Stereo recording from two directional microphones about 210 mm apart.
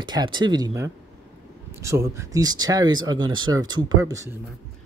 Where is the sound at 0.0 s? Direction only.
20° right (ahead or behind).